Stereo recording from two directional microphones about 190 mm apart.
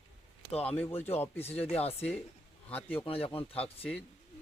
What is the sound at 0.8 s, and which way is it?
Speech, 10° left (ahead or behind).